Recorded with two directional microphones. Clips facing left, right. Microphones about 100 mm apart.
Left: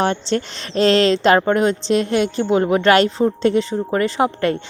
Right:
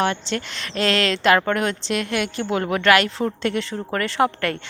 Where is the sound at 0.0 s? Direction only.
35° left (ahead or behind).